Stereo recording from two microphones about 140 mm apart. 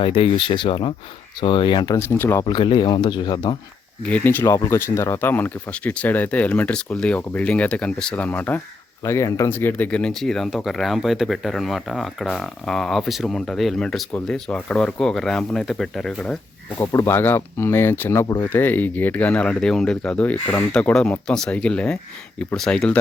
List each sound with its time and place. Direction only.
0.0 s speech: 40° left (ahead or behind)
2.0 s speech: 15° left (ahead or behind)
2.5 s speech: 35° left (ahead or behind)
4.0 s speech: 10° left (ahead or behind)
16.7 s speech: 25° left (ahead or behind); by 23.0 s 5° left (ahead or behind)